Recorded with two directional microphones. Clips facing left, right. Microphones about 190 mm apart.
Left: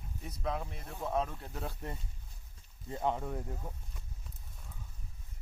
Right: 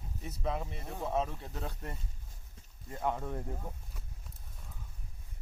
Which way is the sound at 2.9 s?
20° left (ahead or behind).